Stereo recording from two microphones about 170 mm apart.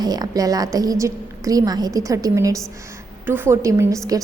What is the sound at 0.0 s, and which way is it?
A woman's voice, 25° right (ahead or behind).